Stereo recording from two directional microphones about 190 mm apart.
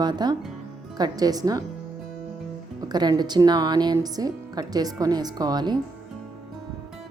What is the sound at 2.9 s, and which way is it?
A woman's voice, 20° right (ahead or behind).